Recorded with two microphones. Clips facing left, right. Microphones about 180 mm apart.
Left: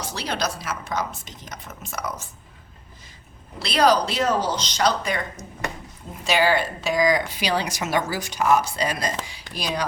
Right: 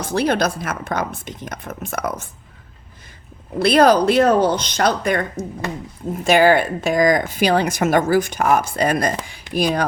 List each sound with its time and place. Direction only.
0.0 s speech: 55° right (ahead or behind)
3.6 s speech: 55° right (ahead or behind)